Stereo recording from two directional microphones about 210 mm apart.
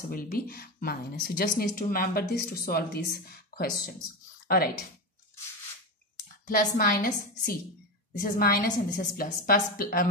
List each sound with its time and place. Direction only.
0.1 s speech: 45° left (ahead or behind)
6.4 s speech: 45° left (ahead or behind)